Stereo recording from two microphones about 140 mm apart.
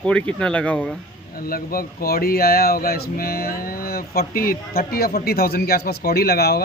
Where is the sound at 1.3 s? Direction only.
90° left.